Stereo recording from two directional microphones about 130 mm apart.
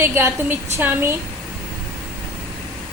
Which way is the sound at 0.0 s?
20° right (ahead or behind).